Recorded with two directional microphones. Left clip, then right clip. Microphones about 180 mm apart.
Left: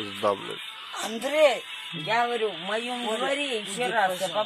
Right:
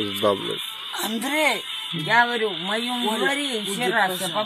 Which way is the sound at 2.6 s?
5° right (ahead or behind).